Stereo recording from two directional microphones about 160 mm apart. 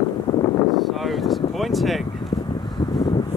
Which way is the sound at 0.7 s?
Centre (ahead or behind).